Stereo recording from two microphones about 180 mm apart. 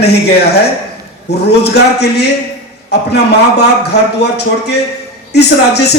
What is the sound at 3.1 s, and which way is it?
Speech, 70° left (ahead or behind).